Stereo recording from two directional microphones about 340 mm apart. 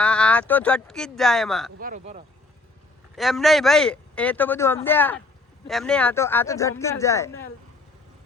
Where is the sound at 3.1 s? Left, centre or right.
Centre.